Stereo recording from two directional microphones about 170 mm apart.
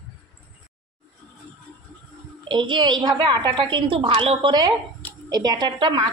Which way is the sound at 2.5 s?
25° right (ahead or behind).